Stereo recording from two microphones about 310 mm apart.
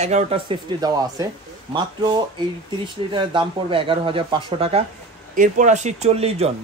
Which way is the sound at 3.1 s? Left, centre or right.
Centre.